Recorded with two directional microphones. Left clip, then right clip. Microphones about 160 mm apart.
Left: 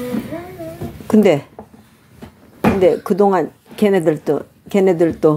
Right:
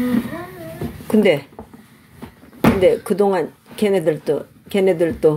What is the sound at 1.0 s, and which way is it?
Speech, 30° left (ahead or behind).